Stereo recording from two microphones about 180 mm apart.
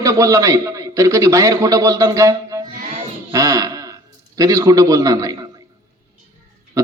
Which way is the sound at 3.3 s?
20° right (ahead or behind).